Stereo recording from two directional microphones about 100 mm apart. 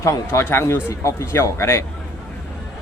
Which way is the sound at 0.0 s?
30° left (ahead or behind).